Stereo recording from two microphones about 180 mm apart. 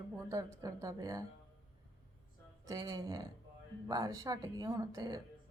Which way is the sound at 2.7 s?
20° right (ahead or behind).